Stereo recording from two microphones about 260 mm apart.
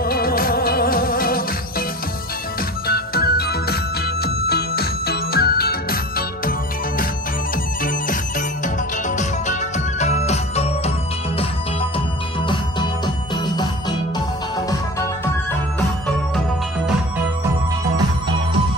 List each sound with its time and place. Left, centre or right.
0.0 s music: left
2.8 s music: left
7.8 s music: left
14.7 s music: centre